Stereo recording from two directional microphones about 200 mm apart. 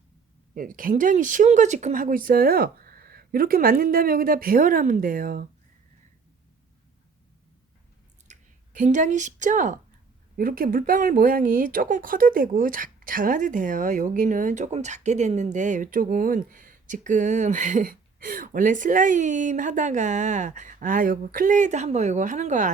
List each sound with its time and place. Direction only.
0.5 s speech: 45° right (ahead or behind)
8.3 s speech: 40° right (ahead or behind)